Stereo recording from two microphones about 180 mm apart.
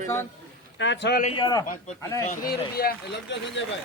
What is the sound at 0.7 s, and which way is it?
Speech, 90° left.